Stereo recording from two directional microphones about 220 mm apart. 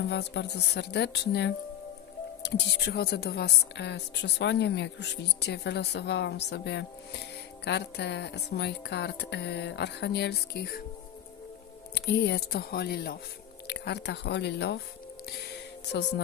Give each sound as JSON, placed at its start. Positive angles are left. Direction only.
{"t": 0.1, "sound": "a woman's voice", "side_deg": 50}
{"t": 11.9, "sound": "a woman's voice", "side_deg": 50}